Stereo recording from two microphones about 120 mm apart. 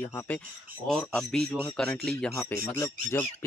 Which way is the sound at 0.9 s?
5° left (ahead or behind).